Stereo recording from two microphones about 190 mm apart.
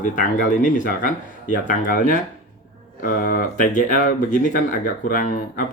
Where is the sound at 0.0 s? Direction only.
45° left (ahead or behind).